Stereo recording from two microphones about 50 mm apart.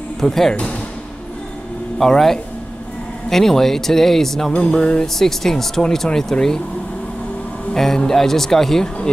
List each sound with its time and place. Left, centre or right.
0.2 s speech: centre
2.0 s speech: centre
4.6 s music: centre
5.0 s speech: centre
7.7 s speech: centre